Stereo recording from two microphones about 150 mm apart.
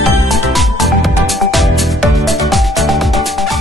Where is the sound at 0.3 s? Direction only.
Centre (ahead or behind).